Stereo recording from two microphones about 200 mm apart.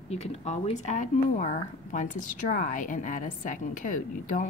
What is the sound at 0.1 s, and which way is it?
Speech, 30° left (ahead or behind).